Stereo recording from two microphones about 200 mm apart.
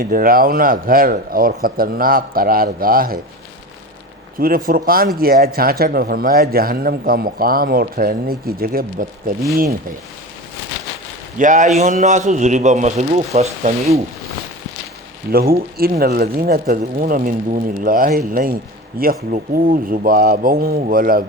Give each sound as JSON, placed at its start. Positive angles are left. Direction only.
{"t": 0.0, "sound": "speech", "side_deg": -45}
{"t": 4.4, "sound": "speech", "side_deg": -45}
{"t": 11.3, "sound": "speech", "side_deg": -40}
{"t": 15.3, "sound": "speech", "side_deg": -50}